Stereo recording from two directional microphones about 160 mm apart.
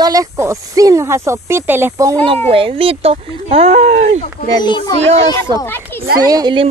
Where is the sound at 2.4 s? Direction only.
35° right (ahead or behind).